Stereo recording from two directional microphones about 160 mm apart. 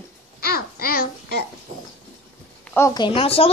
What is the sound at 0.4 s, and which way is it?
Babbling, 70° left (ahead or behind).